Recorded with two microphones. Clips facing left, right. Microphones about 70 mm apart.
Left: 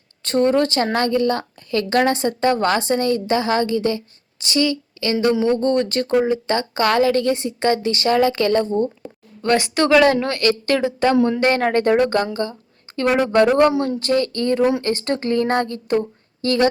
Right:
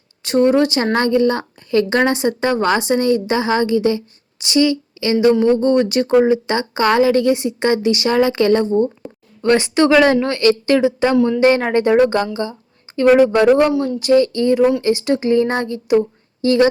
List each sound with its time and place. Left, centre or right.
0.2 s a woman's voice: centre
13.7 s speech: left
14.0 s a woman's voice: centre